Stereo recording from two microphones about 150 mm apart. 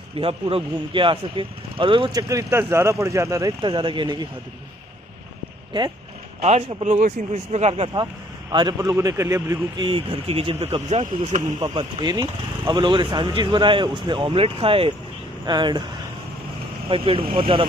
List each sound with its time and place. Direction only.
0.2 s speech: 40° right (ahead or behind)
2.2 s speech: 20° right (ahead or behind)
5.7 s speech: 30° right (ahead or behind)
6.4 s speech: 45° right (ahead or behind)
8.0 s speech: 25° right (ahead or behind)
9.8 s speech: 35° right (ahead or behind)
11.6 s speech: 30° right (ahead or behind)
16.9 s speech: 35° right (ahead or behind)